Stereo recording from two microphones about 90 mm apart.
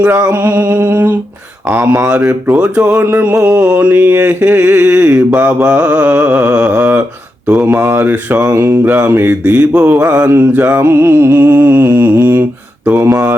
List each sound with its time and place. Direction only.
0.0 s mantra: 15° right (ahead or behind)
2.5 s mantra: 15° right (ahead or behind)
8.5 s mantra: 30° right (ahead or behind)